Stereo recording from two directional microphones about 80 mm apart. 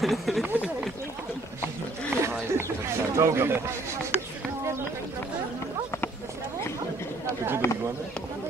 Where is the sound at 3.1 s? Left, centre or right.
Right.